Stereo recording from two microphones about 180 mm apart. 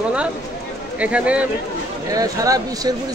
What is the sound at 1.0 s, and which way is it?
Speech, 5° right (ahead or behind).